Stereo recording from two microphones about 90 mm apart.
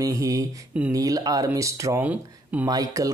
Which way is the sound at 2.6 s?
40° right (ahead or behind).